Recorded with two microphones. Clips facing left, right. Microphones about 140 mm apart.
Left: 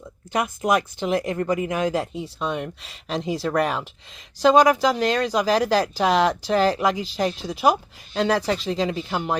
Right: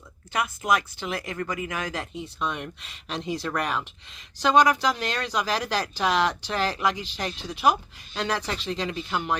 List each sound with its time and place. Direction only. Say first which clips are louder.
0.3 s speech: left 4 dB; 35° left (ahead or behind)